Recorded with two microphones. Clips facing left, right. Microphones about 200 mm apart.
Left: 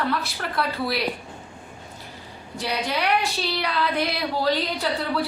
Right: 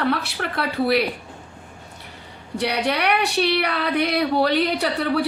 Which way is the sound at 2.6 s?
70° right (ahead or behind).